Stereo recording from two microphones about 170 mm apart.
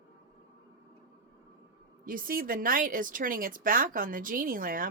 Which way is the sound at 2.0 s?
55° right (ahead or behind).